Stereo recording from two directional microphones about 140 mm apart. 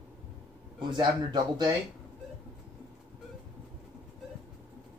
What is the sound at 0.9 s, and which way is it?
Speech, 35° right (ahead or behind).